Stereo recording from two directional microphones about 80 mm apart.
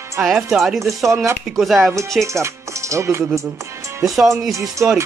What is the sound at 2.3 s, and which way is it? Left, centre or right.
Music, right.